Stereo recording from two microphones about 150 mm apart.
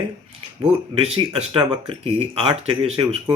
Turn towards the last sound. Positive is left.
turn(degrees=-35)  # may be behind; listen again after turning